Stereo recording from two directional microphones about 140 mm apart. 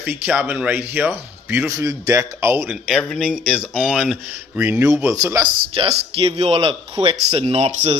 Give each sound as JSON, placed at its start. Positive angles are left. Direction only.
{"t": 0.0, "sound": "speech", "side_deg": -10}
{"t": 2.9, "sound": "speech", "side_deg": 0}
{"t": 4.8, "sound": "speech", "side_deg": -20}
{"t": 5.8, "sound": "speech", "side_deg": -40}